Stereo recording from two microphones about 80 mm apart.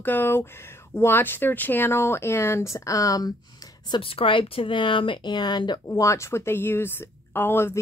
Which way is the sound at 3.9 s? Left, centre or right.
Left.